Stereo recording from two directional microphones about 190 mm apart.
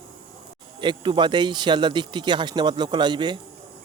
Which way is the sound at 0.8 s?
25° right (ahead or behind).